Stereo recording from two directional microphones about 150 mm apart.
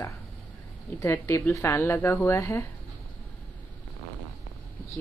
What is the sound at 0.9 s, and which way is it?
Speech, 20° left (ahead or behind).